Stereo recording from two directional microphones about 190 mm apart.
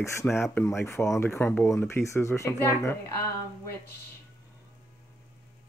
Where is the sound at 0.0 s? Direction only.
15° left (ahead or behind).